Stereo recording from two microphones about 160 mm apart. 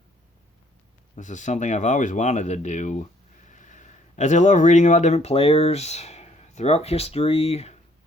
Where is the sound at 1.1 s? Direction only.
50° left (ahead or behind).